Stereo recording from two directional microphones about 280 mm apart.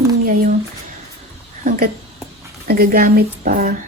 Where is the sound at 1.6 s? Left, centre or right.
Right.